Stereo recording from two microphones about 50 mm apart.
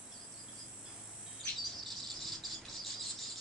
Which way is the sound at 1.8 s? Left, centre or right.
Centre.